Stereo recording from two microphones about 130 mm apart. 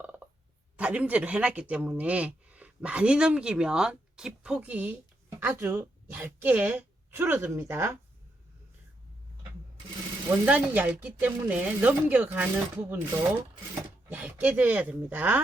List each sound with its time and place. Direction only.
0.0 s a sound: 10° right (ahead or behind)
0.8 s a woman's voice: 10° right (ahead or behind)
10.4 s speech: 10° right (ahead or behind)
14.1 s speech: 15° right (ahead or behind)